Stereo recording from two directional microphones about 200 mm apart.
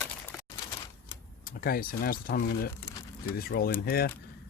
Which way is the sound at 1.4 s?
45° left (ahead or behind).